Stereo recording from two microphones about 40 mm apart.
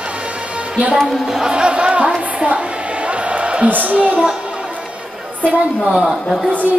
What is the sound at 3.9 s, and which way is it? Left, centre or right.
Music, right.